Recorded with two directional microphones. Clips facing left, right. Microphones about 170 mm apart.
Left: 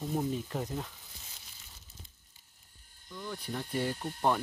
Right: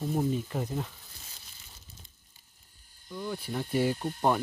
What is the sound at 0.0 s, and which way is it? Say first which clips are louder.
Speech: right 4 dB; 5° right (ahead or behind).